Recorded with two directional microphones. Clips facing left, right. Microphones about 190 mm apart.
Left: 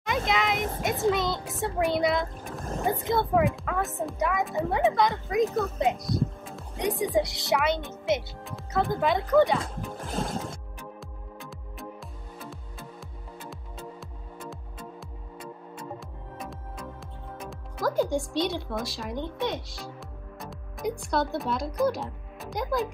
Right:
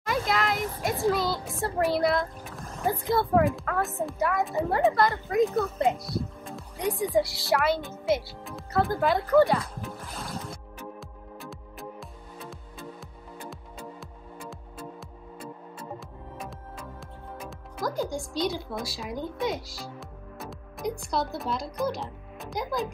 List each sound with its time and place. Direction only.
0.0 s a sound: centre (ahead or behind)
0.6 s a sound: 50° left (ahead or behind)
0.8 s a child's voice: centre (ahead or behind)
2.6 s music: 50° left (ahead or behind)
3.1 s a child's voice: centre (ahead or behind)
6.4 s music: centre (ahead or behind)
7.0 s a child's voice: centre (ahead or behind)
10.0 s music: 50° left (ahead or behind)
11.0 s music: centre (ahead or behind)
17.4 s speech: centre (ahead or behind)